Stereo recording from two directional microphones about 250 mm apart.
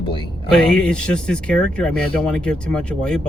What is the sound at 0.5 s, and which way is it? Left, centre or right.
Speech, centre.